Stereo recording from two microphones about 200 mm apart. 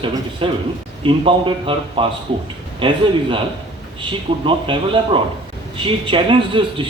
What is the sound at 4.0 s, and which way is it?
Speech, 25° right (ahead or behind).